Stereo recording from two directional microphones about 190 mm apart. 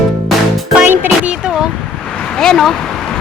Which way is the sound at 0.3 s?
5° right (ahead or behind).